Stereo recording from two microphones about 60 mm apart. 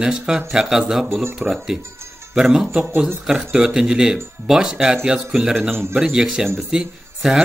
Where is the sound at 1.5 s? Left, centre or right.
Right.